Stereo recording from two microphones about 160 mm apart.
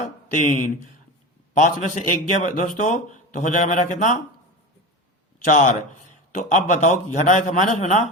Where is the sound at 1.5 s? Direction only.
50° left (ahead or behind).